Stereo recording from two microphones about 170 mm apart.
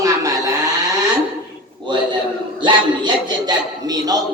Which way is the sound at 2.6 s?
25° right (ahead or behind).